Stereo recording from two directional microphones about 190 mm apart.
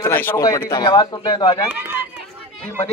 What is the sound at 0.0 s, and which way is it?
Speech, 10° left (ahead or behind).